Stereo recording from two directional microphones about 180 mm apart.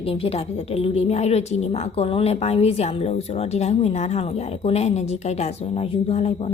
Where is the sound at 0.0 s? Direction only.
30° left (ahead or behind).